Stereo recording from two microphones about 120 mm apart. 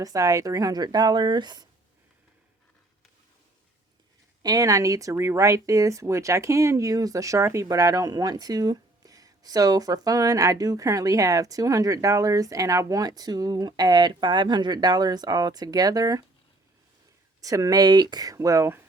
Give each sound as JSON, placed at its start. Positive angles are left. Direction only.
{"t": 0.0, "sound": "speech", "side_deg": -30}
{"t": 4.4, "sound": "speech", "side_deg": -30}
{"t": 17.4, "sound": "speech", "side_deg": -30}